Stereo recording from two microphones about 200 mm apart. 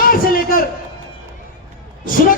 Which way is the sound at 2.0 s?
45° left (ahead or behind).